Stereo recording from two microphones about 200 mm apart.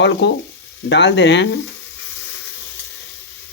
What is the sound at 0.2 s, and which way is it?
Speech, 60° left (ahead or behind).